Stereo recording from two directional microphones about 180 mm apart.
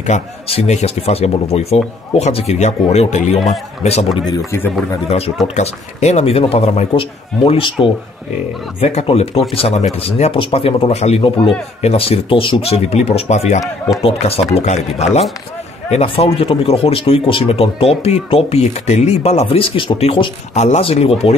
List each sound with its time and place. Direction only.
0.0 s speech: 35° left (ahead or behind)
4.5 s speech: 10° left (ahead or behind)
5.6 s speech: 40° left (ahead or behind)